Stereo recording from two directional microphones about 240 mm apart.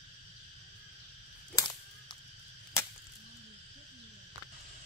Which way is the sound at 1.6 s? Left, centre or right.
Centre.